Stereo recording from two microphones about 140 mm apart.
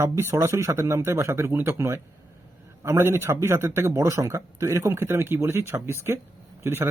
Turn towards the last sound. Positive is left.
turn(degrees=-15)  # may be behind; listen again after turning